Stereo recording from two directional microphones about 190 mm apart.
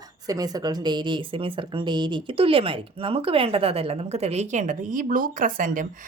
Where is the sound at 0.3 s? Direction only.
20° right (ahead or behind).